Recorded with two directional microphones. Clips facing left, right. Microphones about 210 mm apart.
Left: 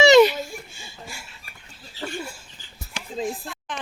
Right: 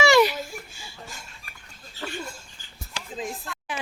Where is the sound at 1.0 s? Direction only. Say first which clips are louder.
Left 3 dB; 10° left (ahead or behind).